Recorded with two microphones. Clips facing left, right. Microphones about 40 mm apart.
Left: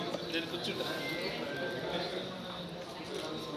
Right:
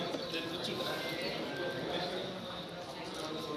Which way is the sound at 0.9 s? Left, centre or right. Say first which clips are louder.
Left 1 dB; left.